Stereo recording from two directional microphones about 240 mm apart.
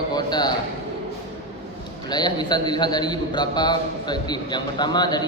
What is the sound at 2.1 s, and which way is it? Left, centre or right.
A man's voice, centre.